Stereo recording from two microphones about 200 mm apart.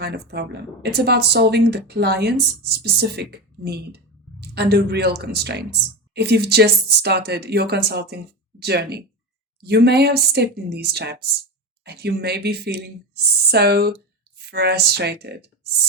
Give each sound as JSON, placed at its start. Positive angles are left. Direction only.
{"t": 0.0, "sound": "speech", "side_deg": -55}